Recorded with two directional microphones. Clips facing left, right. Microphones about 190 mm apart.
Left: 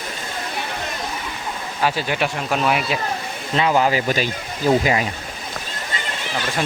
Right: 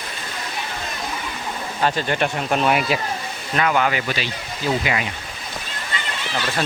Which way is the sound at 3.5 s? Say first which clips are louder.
Left 2 dB; 30° left (ahead or behind).